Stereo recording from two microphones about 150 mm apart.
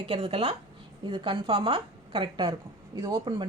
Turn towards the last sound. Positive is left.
turn(degrees=-30)  # may be behind; listen again after turning